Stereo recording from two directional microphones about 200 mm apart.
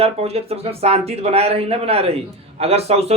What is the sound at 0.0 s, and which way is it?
A man's voice, 30° right (ahead or behind).